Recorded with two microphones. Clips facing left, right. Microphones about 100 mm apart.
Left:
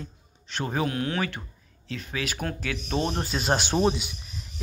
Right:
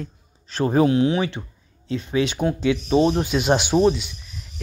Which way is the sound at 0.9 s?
20° right (ahead or behind).